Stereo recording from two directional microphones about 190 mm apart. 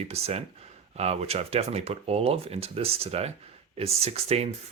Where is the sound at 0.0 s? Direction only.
35° right (ahead or behind).